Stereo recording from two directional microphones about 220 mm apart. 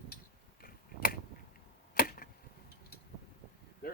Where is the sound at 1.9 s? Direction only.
40° left (ahead or behind).